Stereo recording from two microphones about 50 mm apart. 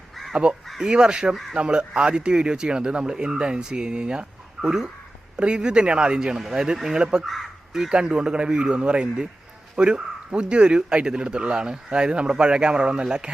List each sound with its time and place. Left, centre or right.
0.8 s speech: centre